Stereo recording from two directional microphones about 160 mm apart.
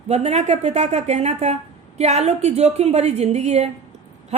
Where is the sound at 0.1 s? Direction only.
45° right (ahead or behind).